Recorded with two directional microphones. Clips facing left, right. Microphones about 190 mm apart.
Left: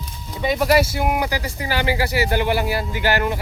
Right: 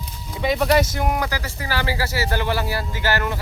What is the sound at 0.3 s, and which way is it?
Speech, centre (ahead or behind).